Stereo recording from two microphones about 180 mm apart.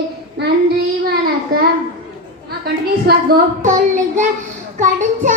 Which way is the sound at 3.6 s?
40° right (ahead or behind).